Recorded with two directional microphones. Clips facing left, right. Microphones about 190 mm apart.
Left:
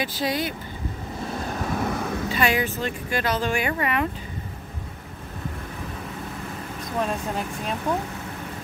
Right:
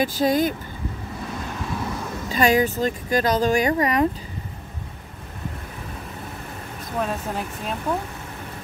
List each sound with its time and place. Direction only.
0.0 s speech: 45° right (ahead or behind)
1.5 s vehicle: 45° left (ahead or behind)
2.2 s speech: 40° right (ahead or behind)
7.0 s speech: centre (ahead or behind)